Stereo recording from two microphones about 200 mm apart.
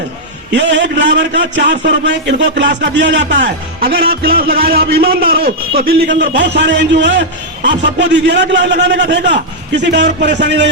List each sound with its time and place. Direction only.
0.5 s speech: 65° right (ahead or behind)